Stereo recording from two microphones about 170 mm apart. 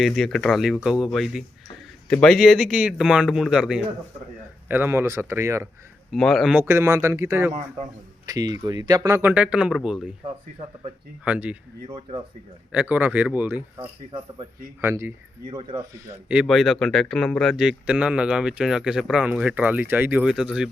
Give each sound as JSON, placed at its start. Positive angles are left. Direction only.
{"t": 0.0, "sound": "speech", "side_deg": 0}
{"t": 6.1, "sound": "speech", "side_deg": 0}
{"t": 11.3, "sound": "speech", "side_deg": -10}
{"t": 14.8, "sound": "speech", "side_deg": -15}
{"t": 16.3, "sound": "speech", "side_deg": -5}